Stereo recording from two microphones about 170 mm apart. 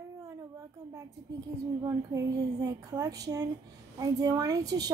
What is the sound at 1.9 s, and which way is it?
A woman's voice, 20° right (ahead or behind).